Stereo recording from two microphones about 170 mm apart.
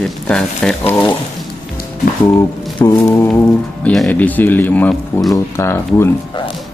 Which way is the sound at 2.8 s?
25° left (ahead or behind).